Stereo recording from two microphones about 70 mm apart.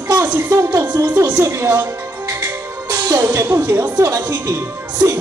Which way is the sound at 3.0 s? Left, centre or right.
Right.